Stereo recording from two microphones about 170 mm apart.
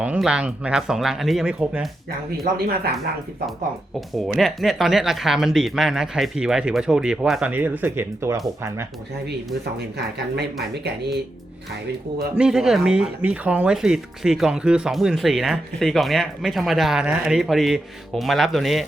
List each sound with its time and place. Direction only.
0.0 s speech: 5° right (ahead or behind)
2.0 s speech: 60° right (ahead or behind)
4.1 s speech: centre (ahead or behind)
12.4 s speech: 5° right (ahead or behind)